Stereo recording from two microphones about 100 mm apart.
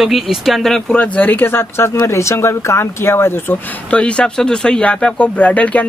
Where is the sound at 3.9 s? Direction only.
10° left (ahead or behind).